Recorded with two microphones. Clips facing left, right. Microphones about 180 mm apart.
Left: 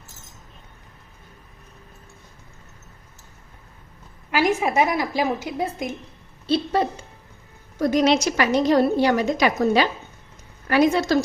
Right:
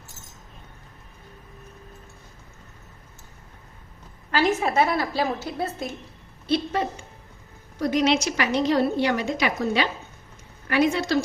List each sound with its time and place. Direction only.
4.3 s a woman's voice: 10° left (ahead or behind)
6.5 s a woman's voice: 35° left (ahead or behind)